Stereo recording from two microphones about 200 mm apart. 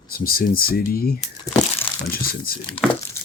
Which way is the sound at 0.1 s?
45° left (ahead or behind).